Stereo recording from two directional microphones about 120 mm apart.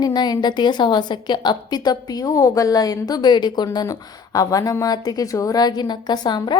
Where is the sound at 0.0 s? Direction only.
35° left (ahead or behind).